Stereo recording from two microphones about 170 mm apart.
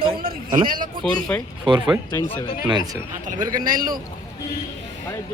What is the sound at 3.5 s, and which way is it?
Speech, 55° right (ahead or behind).